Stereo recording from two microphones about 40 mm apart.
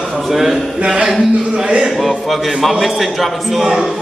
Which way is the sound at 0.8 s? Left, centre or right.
Right.